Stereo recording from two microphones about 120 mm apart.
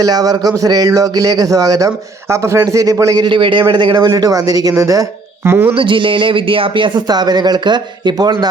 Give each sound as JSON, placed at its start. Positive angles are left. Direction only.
{"t": 0.0, "sound": "a man's voice", "side_deg": -30}
{"t": 3.2, "sound": "a man's voice", "side_deg": -45}
{"t": 5.7, "sound": "a man's voice", "side_deg": -45}